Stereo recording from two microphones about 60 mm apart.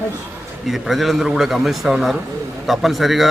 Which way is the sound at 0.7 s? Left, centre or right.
Centre.